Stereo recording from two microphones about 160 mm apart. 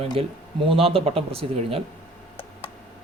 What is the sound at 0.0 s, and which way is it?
Speech, 35° right (ahead or behind).